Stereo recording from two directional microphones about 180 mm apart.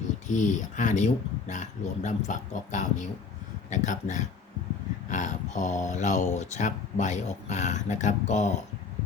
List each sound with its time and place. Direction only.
0.3 s speech: 45° left (ahead or behind)